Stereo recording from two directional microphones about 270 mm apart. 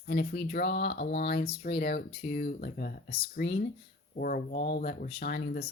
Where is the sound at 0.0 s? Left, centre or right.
Left.